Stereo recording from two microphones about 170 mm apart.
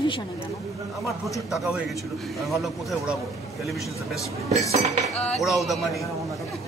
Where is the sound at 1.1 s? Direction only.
Centre (ahead or behind).